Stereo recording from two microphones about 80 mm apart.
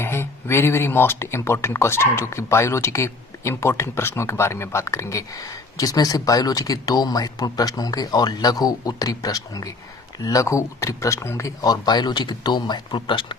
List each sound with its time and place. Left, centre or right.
0.0 s speech: left